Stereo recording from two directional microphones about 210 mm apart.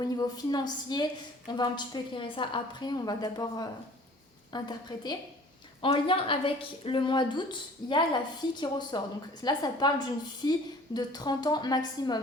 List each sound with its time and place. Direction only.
0.0 s a woman's voice: 20° left (ahead or behind)